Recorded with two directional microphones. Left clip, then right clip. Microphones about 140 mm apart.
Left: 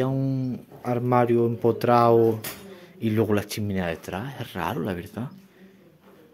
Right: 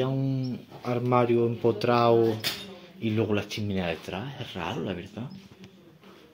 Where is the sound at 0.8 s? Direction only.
25° left (ahead or behind).